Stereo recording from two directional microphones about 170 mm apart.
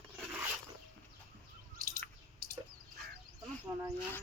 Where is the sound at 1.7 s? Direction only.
55° right (ahead or behind).